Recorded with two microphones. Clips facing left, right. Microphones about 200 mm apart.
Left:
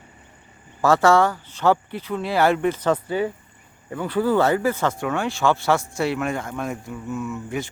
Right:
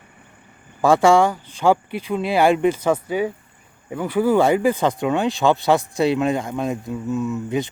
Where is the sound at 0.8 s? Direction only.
15° right (ahead or behind).